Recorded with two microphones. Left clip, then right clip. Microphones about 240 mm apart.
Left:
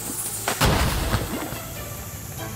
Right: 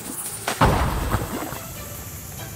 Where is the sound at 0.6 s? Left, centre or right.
Left.